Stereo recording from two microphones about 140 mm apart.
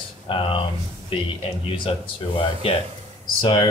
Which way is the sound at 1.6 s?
40° left (ahead or behind).